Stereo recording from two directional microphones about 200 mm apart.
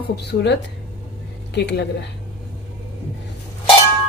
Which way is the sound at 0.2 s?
55° left (ahead or behind).